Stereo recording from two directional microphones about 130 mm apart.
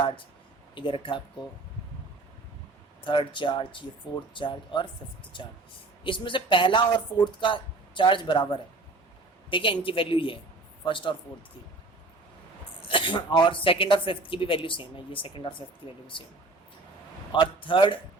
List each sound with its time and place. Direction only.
0.8 s speech: 40° left (ahead or behind)
3.0 s speech: 40° left (ahead or behind)
9.5 s speech: 40° left (ahead or behind)
12.9 s speech: 40° left (ahead or behind)
17.3 s speech: 40° left (ahead or behind)